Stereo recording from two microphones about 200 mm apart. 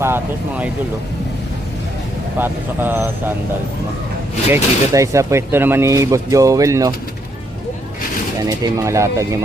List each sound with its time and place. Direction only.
2.4 s speech: 10° right (ahead or behind)
4.5 s speech: 15° right (ahead or behind)
8.4 s speech: 20° right (ahead or behind)